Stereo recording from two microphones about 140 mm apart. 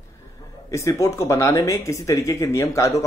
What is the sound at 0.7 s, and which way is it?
Speech, 20° left (ahead or behind).